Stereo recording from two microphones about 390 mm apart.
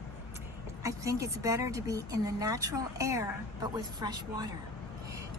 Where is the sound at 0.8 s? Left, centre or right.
Centre.